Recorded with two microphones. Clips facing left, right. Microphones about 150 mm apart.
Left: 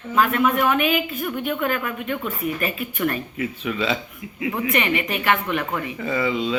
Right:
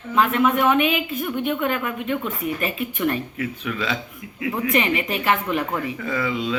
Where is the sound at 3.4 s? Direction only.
5° left (ahead or behind).